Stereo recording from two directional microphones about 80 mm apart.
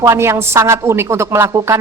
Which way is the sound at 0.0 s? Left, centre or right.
Right.